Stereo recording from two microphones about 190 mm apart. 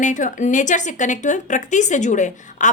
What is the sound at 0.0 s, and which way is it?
Speech, 40° left (ahead or behind).